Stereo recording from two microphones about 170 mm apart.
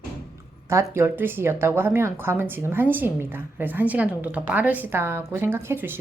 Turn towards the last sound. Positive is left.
turn(degrees=-15)  # may be behind; listen again after turning